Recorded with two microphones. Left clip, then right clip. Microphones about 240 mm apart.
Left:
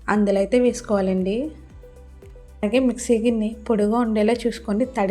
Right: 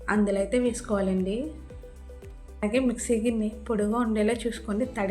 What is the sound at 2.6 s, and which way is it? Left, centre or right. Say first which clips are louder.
A woman's voice: left 6 dB; left.